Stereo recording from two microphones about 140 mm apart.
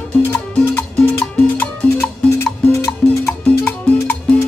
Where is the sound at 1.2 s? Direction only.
10° left (ahead or behind).